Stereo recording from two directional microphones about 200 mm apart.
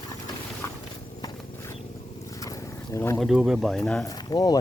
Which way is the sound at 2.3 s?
15° left (ahead or behind).